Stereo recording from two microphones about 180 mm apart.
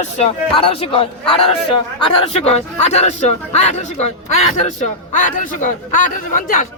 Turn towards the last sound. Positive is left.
turn(degrees=45)  # may be behind; listen again after turning